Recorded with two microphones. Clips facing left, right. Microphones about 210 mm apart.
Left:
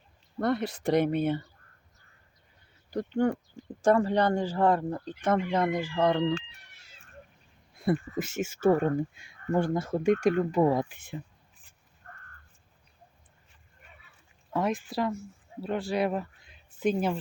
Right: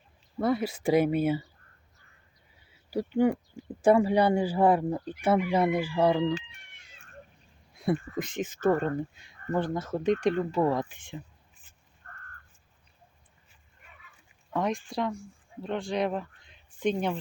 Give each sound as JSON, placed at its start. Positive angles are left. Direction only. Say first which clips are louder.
{"t": 0.3, "sound": "speech", "louder": "right 1 dB", "side_deg": -5}
{"t": 2.6, "sound": "a sound", "louder": "right 2 dB", "side_deg": -5}
{"t": 3.8, "sound": "speech", "louder": "right 2 dB", "side_deg": -10}
{"t": 12.0, "sound": "crow", "louder": "left 2 dB", "side_deg": 5}
{"t": 14.5, "sound": "speech", "louder": "left 1 dB", "side_deg": 5}